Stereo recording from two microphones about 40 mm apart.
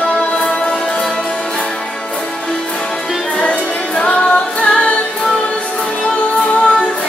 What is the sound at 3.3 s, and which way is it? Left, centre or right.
Music, left.